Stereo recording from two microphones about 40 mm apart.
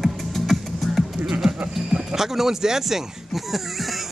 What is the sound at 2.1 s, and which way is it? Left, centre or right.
Speech, centre.